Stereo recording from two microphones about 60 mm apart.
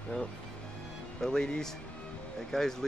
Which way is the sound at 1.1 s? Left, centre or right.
Centre.